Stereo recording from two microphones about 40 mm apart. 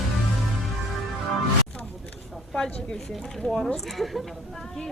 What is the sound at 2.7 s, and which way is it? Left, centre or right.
Speech, left.